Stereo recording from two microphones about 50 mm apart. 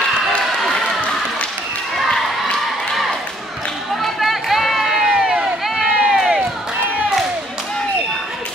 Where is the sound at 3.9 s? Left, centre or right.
Centre.